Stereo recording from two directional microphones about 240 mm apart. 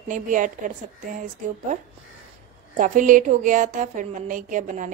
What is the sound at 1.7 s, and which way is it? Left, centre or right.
A woman's voice, right.